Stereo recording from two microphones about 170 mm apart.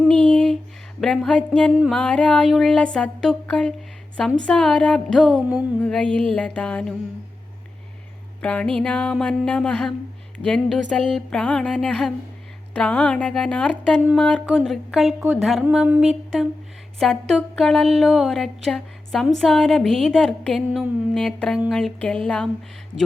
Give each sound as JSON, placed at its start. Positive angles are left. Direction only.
{"t": 0.0, "sound": "a sound", "side_deg": 5}
{"t": 1.0, "sound": "speech", "side_deg": 5}
{"t": 5.8, "sound": "music", "side_deg": 5}
{"t": 8.4, "sound": "speech", "side_deg": 5}